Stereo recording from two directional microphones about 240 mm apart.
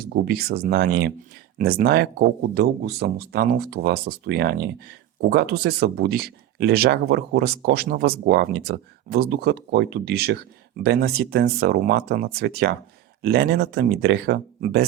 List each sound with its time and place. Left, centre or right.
0.0 s speech: right